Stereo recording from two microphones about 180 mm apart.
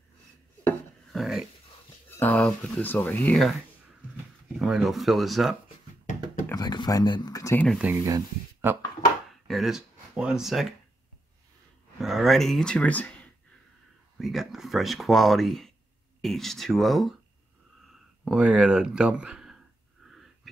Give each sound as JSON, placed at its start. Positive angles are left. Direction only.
{"t": 1.1, "sound": "dog", "side_deg": 0}
{"t": 2.0, "sound": "speech", "side_deg": 10}
{"t": 4.6, "sound": "speech", "side_deg": -5}
{"t": 6.5, "sound": "speech", "side_deg": 25}
{"t": 7.6, "sound": "speech", "side_deg": 0}
{"t": 7.9, "sound": "speech", "side_deg": -15}
{"t": 9.5, "sound": "speech", "side_deg": 0}
{"t": 12.0, "sound": "speech", "side_deg": 0}
{"t": 18.2, "sound": "speech", "side_deg": -5}